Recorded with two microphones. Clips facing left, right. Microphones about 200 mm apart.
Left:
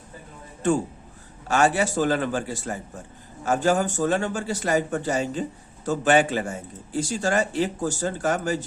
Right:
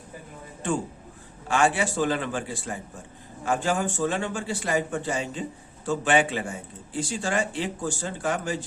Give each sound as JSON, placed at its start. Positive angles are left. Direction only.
{"t": 1.5, "sound": "a man's voice", "side_deg": 40}